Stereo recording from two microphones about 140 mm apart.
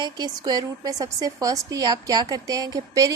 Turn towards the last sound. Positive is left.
turn(degrees=-25)  # may be behind; listen again after turning